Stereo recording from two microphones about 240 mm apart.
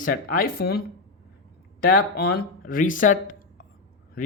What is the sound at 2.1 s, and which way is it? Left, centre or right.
Speech, left.